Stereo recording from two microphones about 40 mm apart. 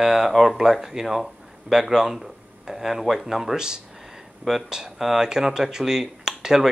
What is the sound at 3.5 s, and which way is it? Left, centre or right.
Speech, centre.